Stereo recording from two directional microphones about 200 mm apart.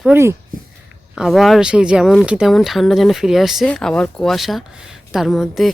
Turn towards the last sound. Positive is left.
turn(degrees=0)  # may be behind; listen again after turning